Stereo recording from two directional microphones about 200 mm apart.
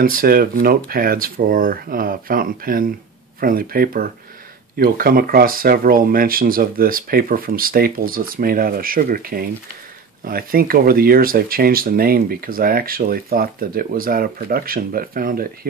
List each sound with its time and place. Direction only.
0.0 s speech: 45° right (ahead or behind)